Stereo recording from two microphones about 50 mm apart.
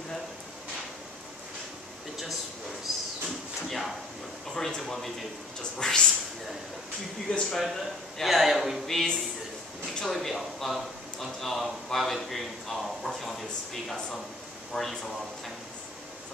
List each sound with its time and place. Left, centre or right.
3.6 s speech: centre
7.2 s speech: centre
7.5 s speech: centre
8.8 s speech: centre